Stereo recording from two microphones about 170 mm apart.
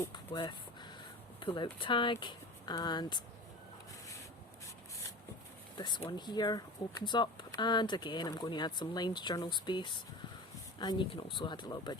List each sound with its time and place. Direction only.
0.3 s a sound: 25° left (ahead or behind)
1.4 s speech: 30° left (ahead or behind)
5.7 s speech: 25° left (ahead or behind)